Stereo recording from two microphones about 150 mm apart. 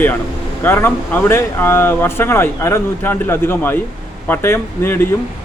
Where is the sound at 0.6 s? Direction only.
15° left (ahead or behind).